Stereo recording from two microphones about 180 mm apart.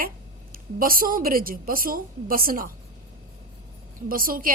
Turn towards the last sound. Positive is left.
turn(degrees=-50)  # may be behind; listen again after turning